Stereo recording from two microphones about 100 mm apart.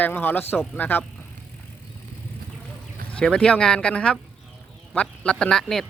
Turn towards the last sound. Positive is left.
turn(degrees=5)  # may be behind; listen again after turning